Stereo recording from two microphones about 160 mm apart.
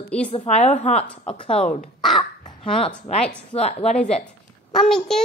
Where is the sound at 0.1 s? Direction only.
5° left (ahead or behind).